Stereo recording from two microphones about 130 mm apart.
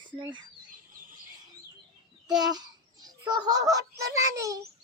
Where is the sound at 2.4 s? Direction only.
30° right (ahead or behind).